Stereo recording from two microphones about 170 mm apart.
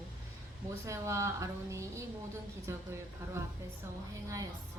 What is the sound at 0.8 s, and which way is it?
Speech, 15° right (ahead or behind).